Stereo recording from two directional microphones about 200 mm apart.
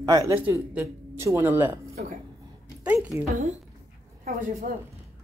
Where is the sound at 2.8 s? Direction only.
5° right (ahead or behind).